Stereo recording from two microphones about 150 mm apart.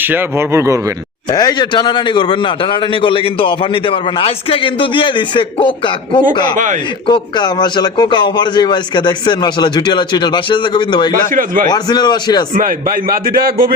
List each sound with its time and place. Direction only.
0.0 s speech: 15° right (ahead or behind)
1.3 s a man's voice: 25° left (ahead or behind)
11.3 s a man's voice: 65° right (ahead or behind)
11.7 s a man's voice: 30° left (ahead or behind)
12.5 s a man's voice: 70° right (ahead or behind)